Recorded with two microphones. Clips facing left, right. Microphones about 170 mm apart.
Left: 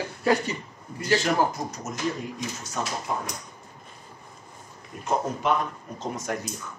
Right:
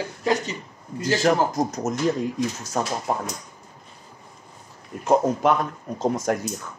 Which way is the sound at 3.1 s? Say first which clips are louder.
Right 5 dB; 70° right (ahead or behind).